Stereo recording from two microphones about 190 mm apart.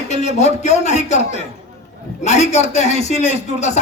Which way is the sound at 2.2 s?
35° left (ahead or behind).